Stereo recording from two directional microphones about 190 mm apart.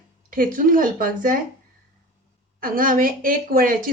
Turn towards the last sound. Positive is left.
turn(degrees=-45)  # may be behind; listen again after turning